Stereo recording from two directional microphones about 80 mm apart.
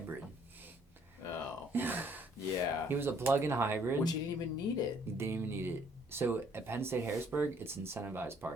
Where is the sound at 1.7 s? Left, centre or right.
Right.